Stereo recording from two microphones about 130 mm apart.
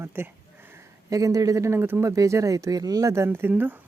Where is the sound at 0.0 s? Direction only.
15° right (ahead or behind).